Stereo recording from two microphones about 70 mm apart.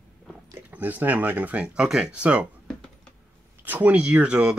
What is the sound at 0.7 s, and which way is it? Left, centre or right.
Speech, right.